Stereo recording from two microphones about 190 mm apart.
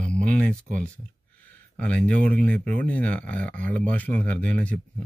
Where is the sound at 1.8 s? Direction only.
5° left (ahead or behind).